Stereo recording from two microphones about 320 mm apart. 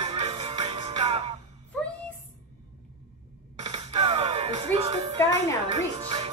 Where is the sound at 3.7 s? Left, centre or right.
Centre.